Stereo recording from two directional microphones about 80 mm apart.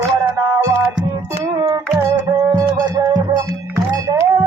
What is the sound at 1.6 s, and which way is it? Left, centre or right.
Music, right.